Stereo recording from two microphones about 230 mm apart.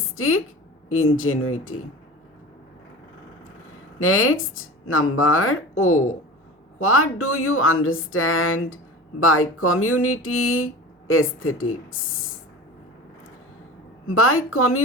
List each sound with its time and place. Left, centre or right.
0.2 s speech: left
4.0 s speech: left
14.1 s a woman's voice: left